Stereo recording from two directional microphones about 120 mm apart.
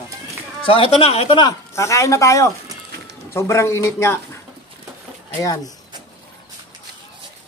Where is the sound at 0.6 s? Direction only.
50° left (ahead or behind).